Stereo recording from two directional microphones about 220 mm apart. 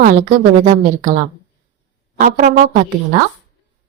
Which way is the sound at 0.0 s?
35° right (ahead or behind).